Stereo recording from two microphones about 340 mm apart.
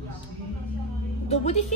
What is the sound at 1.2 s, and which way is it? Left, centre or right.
Speech, centre.